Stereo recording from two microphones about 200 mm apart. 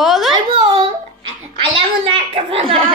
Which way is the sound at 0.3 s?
25° right (ahead or behind).